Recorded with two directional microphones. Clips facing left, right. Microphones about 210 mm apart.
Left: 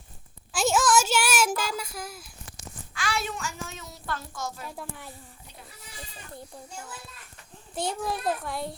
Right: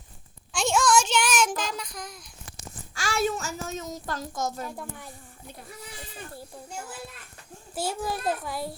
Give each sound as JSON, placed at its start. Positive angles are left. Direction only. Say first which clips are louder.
{"t": 0.5, "sound": "child singing", "louder": "even", "side_deg": 5}
{"t": 2.9, "sound": "a child's voice", "louder": "right 5 dB", "side_deg": -45}
{"t": 4.6, "sound": "a child's voice", "louder": "right 2 dB", "side_deg": 0}
{"t": 7.8, "sound": "a child's voice", "louder": "even", "side_deg": -5}